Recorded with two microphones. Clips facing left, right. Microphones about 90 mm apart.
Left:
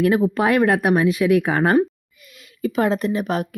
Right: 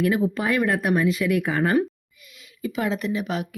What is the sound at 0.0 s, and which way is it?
Speech, 50° left (ahead or behind).